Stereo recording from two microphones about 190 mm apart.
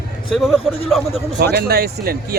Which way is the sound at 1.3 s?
55° right (ahead or behind).